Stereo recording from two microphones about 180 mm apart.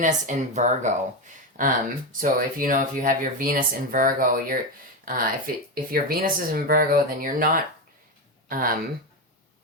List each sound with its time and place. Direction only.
0.0 s speech: 45° right (ahead or behind)